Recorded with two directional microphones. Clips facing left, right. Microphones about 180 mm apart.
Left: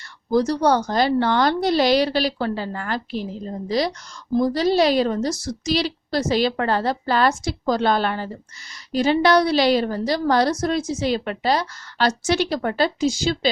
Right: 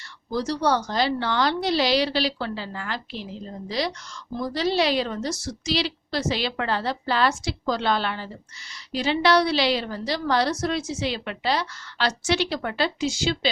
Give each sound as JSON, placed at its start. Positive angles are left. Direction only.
{"t": 0.3, "sound": "a woman's voice", "side_deg": 50}